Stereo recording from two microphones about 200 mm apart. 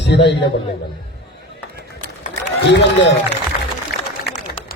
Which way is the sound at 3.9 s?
55° left (ahead or behind).